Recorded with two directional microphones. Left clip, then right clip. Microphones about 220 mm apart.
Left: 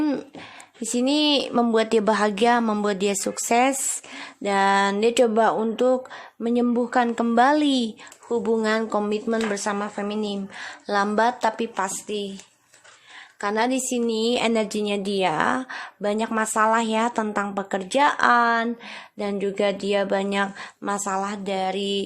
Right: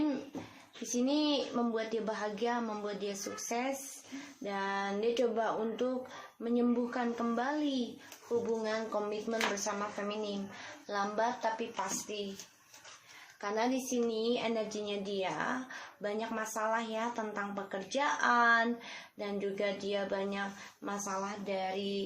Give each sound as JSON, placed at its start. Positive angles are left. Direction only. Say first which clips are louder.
{"t": 0.9, "sound": "a woman's voice", "louder": "left 11 dB", "side_deg": 50}
{"t": 13.4, "sound": "a woman's voice", "louder": "left 10 dB", "side_deg": 45}